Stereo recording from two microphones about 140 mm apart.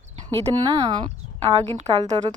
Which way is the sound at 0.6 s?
30° right (ahead or behind).